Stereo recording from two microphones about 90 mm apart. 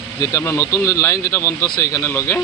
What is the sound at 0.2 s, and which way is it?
Speech, 40° left (ahead or behind).